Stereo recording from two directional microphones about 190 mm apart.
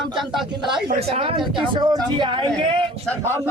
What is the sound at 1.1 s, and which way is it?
A man's voice, 30° right (ahead or behind).